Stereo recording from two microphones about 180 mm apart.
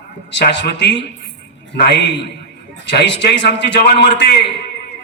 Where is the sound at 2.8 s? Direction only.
80° left.